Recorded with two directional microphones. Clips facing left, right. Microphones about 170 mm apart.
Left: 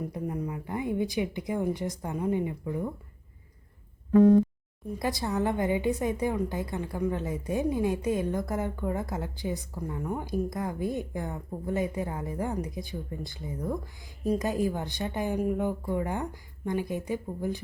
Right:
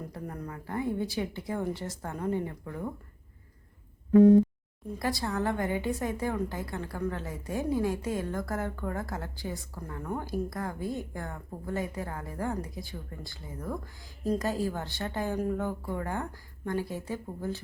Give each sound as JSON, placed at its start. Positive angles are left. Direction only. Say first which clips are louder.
{"t": 0.0, "sound": "speech", "louder": "left 6 dB", "side_deg": 10}
{"t": 4.9, "sound": "a woman's voice", "louder": "left 2 dB", "side_deg": 20}